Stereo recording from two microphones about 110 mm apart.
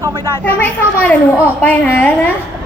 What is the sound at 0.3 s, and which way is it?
A woman's voice, 20° left (ahead or behind).